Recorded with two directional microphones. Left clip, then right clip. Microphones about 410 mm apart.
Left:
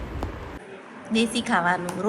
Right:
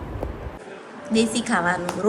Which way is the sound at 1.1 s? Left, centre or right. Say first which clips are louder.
Right 1 dB; centre.